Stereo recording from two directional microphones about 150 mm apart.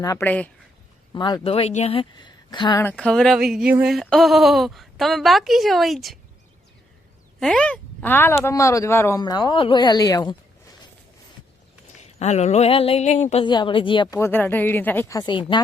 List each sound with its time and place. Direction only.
0.0 s speech: 20° left (ahead or behind)
0.3 s speech: 10° left (ahead or behind)
1.1 s speech: 30° left (ahead or behind)
2.8 s a woman's voice: 5° left (ahead or behind)
3.7 s a sound: 10° right (ahead or behind)
3.9 s a woman's voice: centre (ahead or behind)
7.3 s speech: 5° left (ahead or behind); by 10.3 s 25° left (ahead or behind)
11.9 s a sound: 50° left (ahead or behind)
13.4 s speech: 30° left (ahead or behind)
14.2 s speech: 15° left (ahead or behind)
15.1 s speech: 30° left (ahead or behind)